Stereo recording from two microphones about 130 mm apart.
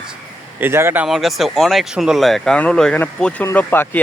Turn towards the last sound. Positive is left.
turn(degrees=15)  # may be behind; listen again after turning